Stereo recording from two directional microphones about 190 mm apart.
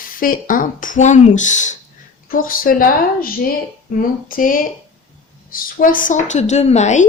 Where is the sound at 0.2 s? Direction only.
45° left (ahead or behind).